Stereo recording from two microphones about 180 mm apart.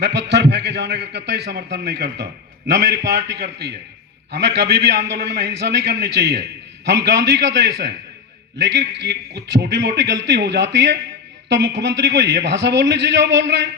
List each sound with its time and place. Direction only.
0.0 s a man's voice: 70° right (ahead or behind)